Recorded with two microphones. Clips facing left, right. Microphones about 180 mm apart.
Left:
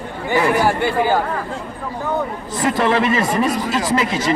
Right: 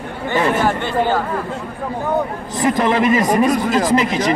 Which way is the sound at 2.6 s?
20° right (ahead or behind).